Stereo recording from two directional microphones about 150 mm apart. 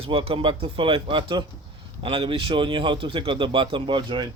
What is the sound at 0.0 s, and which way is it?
A man's voice, 40° right (ahead or behind).